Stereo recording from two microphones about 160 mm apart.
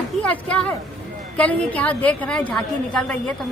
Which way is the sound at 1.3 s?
10° left (ahead or behind).